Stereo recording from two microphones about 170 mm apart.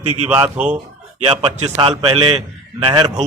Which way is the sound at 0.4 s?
10° right (ahead or behind).